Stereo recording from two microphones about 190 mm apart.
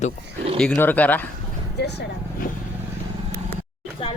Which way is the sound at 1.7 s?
60° left (ahead or behind).